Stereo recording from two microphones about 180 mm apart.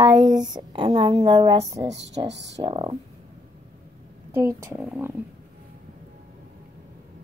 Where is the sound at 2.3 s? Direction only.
75° right (ahead or behind).